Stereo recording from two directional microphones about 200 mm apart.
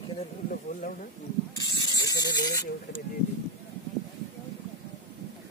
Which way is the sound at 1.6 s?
20° left (ahead or behind).